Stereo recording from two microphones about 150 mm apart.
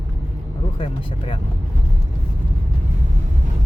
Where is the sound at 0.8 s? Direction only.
35° left (ahead or behind).